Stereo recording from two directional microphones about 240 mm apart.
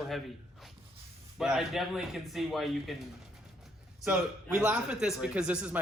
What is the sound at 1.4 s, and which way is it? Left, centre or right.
A man's voice, centre.